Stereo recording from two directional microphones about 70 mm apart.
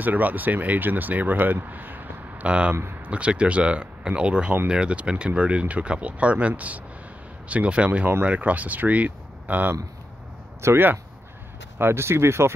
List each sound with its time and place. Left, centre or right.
0.0 s speech: right
10.6 s speech: right